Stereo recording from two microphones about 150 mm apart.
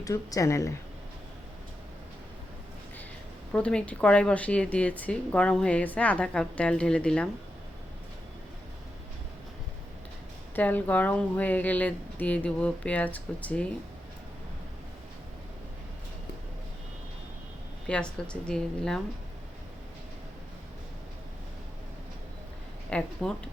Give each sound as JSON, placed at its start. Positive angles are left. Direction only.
{"t": 0.0, "sound": "speech", "side_deg": 20}
{"t": 3.5, "sound": "a woman's voice", "side_deg": 5}
{"t": 10.5, "sound": "a woman's voice", "side_deg": 10}
{"t": 17.8, "sound": "a woman's voice", "side_deg": 5}
{"t": 22.9, "sound": "a woman's voice", "side_deg": 10}